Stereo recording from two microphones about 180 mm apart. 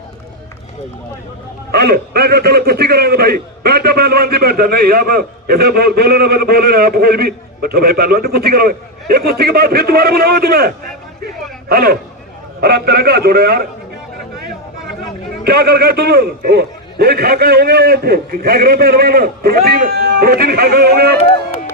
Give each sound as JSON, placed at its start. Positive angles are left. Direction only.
{"t": 1.7, "sound": "a man's voice", "side_deg": -60}
{"t": 15.4, "sound": "a man's voice", "side_deg": -60}
{"t": 21.2, "sound": "music", "side_deg": 35}